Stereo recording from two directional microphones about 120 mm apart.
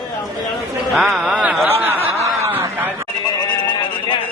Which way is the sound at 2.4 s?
20° right (ahead or behind).